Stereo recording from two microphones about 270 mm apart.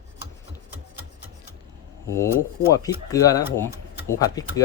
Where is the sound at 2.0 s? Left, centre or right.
Centre.